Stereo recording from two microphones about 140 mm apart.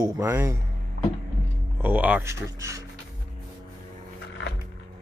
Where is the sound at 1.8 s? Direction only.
10° right (ahead or behind).